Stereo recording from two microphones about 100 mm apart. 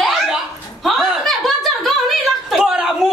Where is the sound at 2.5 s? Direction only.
5° right (ahead or behind).